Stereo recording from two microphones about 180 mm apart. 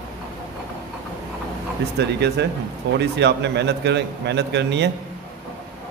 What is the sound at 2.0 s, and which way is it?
A man's voice, 70° right (ahead or behind).